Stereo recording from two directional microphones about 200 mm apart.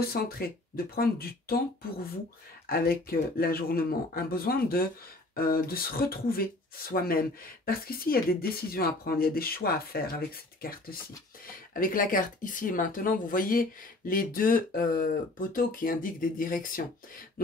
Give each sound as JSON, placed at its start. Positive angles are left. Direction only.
{"t": 0.0, "sound": "speech", "side_deg": 50}
{"t": 2.6, "sound": "speech", "side_deg": 50}